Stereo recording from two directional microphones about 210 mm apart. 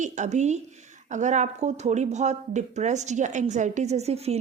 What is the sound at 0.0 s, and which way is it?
A woman's voice, 35° right (ahead or behind).